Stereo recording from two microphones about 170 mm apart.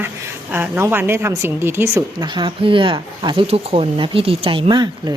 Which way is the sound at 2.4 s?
30° right (ahead or behind).